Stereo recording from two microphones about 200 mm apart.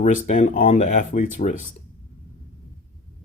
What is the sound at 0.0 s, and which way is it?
Speech, 40° left (ahead or behind).